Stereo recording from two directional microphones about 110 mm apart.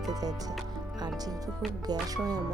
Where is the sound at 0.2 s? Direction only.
35° right (ahead or behind).